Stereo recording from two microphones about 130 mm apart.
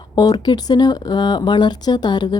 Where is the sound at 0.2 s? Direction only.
30° left (ahead or behind).